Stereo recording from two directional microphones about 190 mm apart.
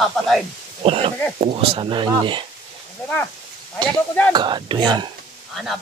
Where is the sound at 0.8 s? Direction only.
30° right (ahead or behind).